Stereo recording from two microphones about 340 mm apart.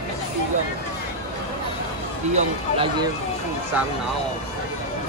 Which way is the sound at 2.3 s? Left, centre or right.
Centre.